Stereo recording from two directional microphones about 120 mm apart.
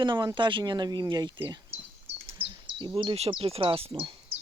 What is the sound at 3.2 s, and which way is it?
Speech, 55° right (ahead or behind).